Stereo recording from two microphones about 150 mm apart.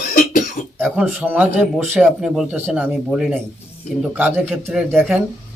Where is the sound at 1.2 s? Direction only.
10° right (ahead or behind).